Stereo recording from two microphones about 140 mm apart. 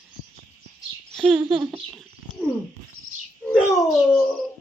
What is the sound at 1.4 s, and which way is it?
Speech, 30° right (ahead or behind).